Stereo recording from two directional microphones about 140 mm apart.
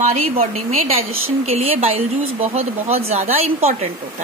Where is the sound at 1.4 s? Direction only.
45° right (ahead or behind).